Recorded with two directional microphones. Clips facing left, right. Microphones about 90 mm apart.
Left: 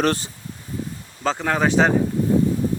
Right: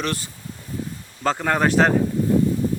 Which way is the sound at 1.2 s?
5° right (ahead or behind).